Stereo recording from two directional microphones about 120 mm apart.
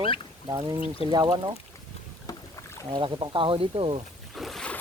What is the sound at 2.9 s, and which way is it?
Speech, 40° right (ahead or behind).